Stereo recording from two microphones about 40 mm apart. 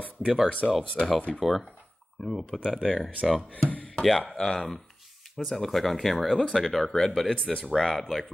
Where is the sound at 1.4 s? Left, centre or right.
Centre.